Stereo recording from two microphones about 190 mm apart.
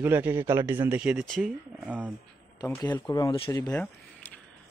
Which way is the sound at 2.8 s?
20° left (ahead or behind).